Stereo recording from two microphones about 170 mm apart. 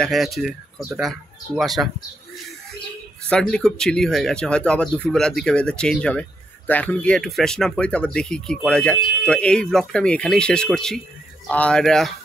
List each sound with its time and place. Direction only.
0.0 s speech: centre (ahead or behind)
3.3 s speech: 5° left (ahead or behind)